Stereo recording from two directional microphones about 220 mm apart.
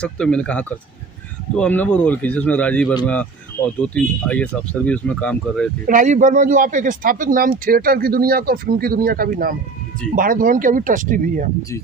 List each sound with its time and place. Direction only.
0.0 s speech: 5° left (ahead or behind)
5.8 s speech: 35° right (ahead or behind)